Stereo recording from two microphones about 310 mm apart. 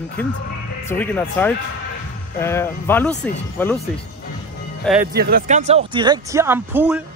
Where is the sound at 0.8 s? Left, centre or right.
Centre.